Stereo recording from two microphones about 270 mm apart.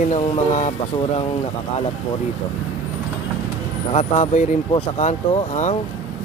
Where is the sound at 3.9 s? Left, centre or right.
Left.